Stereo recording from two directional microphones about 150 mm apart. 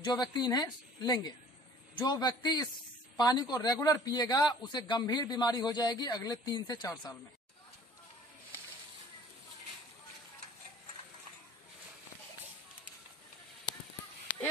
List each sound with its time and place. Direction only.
0.0 s a man's voice: 30° left (ahead or behind)